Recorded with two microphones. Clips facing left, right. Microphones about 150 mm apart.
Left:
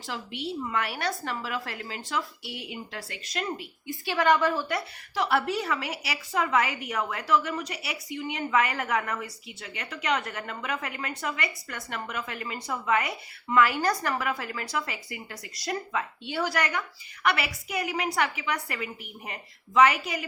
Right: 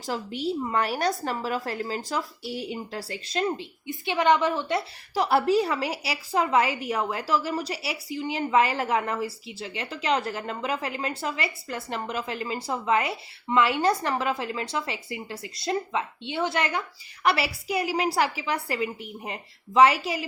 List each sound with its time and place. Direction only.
0.0 s a woman's voice: 40° right (ahead or behind); by 4.8 s 20° right (ahead or behind)
5.1 s a woman's voice: 35° right (ahead or behind)